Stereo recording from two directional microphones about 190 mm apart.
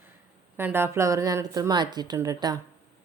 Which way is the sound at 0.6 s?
10° right (ahead or behind).